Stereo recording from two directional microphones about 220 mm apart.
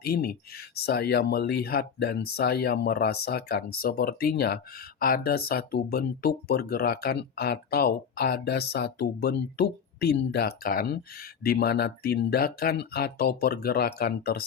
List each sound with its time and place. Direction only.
0.0 s speech: 45° left (ahead or behind)